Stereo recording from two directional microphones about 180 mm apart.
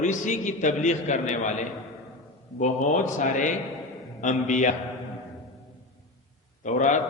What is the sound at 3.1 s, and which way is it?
A man's voice, 45° left (ahead or behind).